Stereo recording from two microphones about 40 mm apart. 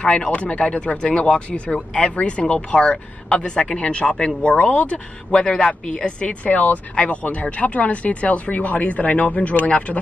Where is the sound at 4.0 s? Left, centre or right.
Left.